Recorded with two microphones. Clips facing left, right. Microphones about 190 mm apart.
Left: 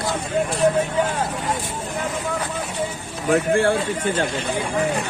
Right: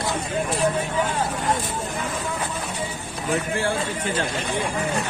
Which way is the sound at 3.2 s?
60° left (ahead or behind).